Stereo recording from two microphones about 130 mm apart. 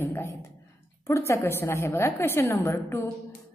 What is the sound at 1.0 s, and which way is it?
A woman's voice, 20° left (ahead or behind).